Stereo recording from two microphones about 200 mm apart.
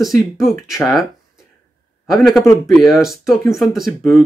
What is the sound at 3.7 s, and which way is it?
Speech, centre (ahead or behind).